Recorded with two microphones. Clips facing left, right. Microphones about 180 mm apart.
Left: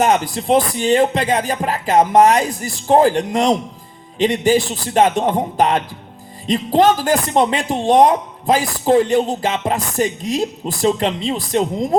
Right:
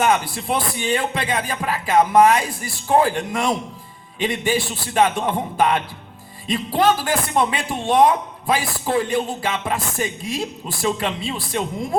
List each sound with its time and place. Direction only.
0.0 s a man's voice: 40° left (ahead or behind)